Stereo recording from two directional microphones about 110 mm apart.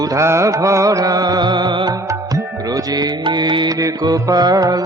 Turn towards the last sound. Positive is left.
turn(degrees=-35)  # may be behind; listen again after turning